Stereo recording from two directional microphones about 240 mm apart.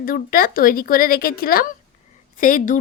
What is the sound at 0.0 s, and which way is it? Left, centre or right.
A woman's voice, left.